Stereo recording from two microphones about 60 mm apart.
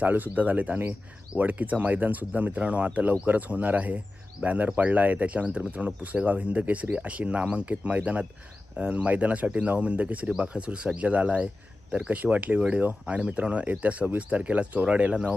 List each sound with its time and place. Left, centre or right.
0.0 s speech: right
12.1 s speech: right